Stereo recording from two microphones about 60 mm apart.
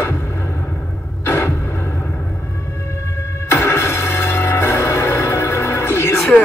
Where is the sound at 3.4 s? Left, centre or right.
Left.